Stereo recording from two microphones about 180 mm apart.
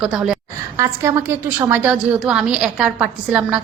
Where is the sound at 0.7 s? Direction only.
15° right (ahead or behind).